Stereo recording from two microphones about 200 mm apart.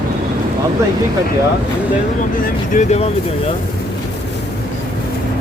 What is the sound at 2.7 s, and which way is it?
Speech, 35° left (ahead or behind).